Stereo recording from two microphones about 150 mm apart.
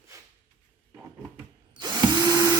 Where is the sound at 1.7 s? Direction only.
30° right (ahead or behind).